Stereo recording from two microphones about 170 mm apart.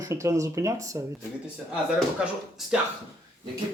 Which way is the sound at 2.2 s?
5° right (ahead or behind).